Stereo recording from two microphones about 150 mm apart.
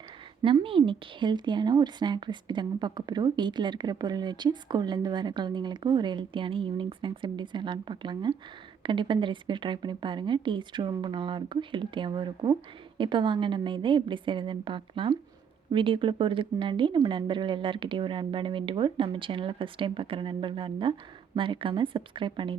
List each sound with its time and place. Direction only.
0.4 s speech: 35° right (ahead or behind)